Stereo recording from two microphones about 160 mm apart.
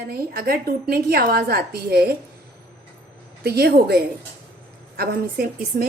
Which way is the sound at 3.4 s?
90° right.